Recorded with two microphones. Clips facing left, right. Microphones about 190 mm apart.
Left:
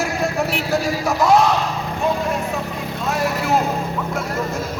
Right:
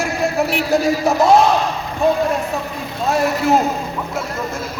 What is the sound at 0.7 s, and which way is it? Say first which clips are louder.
Speech: right 4 dB; 25° right (ahead or behind).